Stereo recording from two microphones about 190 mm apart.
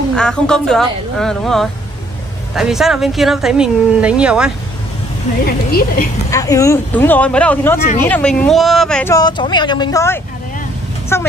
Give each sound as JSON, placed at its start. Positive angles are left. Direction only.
{"t": 0.1, "sound": "speech", "side_deg": 5}
{"t": 5.7, "sound": "a woman's voice", "side_deg": 50}
{"t": 6.3, "sound": "speech", "side_deg": 15}
{"t": 9.1, "sound": "speech", "side_deg": 20}